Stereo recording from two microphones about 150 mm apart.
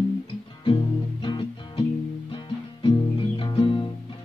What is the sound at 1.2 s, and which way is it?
Music, 35° left (ahead or behind).